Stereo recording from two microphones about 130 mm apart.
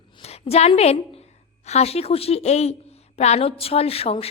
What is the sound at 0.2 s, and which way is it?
A woman's voice, 50° left (ahead or behind).